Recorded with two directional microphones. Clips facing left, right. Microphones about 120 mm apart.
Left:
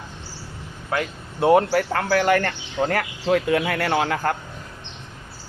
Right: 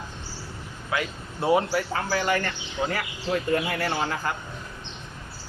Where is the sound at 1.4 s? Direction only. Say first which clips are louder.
Left 6 dB; 60° left (ahead or behind).